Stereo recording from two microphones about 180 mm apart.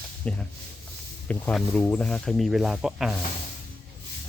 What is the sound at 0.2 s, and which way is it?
Speech, 10° left (ahead or behind).